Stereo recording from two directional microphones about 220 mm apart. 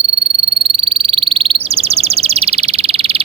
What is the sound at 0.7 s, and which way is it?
Frog, 25° right (ahead or behind).